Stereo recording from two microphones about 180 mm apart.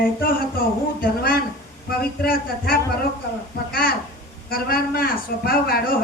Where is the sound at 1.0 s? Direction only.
55° left (ahead or behind).